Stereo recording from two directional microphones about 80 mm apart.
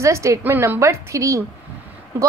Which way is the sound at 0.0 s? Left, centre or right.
Right.